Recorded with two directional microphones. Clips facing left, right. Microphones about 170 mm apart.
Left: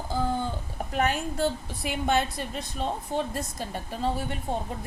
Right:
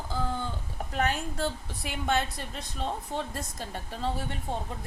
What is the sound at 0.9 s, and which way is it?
Speech, 15° left (ahead or behind).